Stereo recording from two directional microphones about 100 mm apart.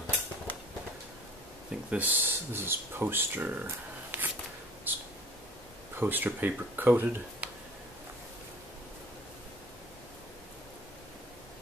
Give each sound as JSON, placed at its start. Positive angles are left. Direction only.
{"t": 1.9, "sound": "speech", "side_deg": -15}
{"t": 4.9, "sound": "a sound", "side_deg": -20}
{"t": 5.9, "sound": "speech", "side_deg": -20}